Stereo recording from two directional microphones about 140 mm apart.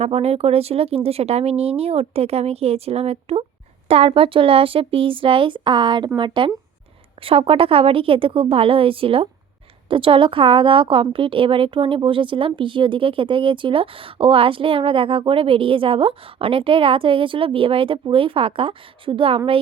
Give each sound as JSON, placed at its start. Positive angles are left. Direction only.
{"t": 0.0, "sound": "a woman's voice", "side_deg": -45}